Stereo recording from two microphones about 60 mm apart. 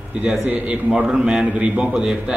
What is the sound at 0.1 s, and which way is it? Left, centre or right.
A man's voice, centre.